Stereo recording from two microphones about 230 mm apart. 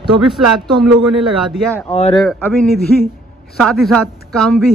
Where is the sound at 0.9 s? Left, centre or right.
Centre.